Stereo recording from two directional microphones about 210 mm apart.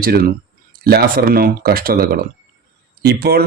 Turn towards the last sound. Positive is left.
turn(degrees=-50)  # may be behind; listen again after turning